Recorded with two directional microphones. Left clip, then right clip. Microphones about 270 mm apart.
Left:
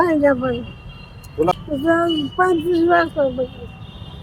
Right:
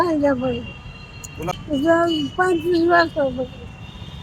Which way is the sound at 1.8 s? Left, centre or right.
Centre.